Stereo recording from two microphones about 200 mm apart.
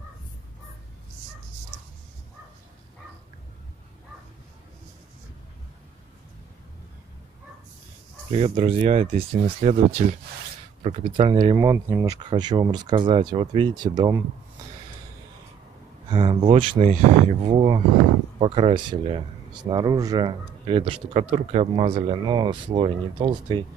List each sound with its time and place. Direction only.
8.3 s speech: 30° right (ahead or behind)
16.1 s speech: 25° right (ahead or behind)